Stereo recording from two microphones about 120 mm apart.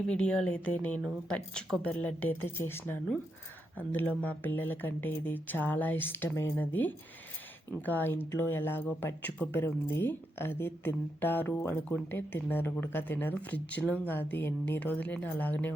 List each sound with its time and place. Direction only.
0.1 s speech: 10° left (ahead or behind)